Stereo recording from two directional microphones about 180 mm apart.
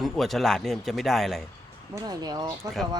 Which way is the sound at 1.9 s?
20° right (ahead or behind).